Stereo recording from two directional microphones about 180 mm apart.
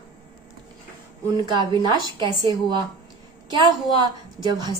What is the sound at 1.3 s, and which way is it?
A woman's voice, 25° right (ahead or behind).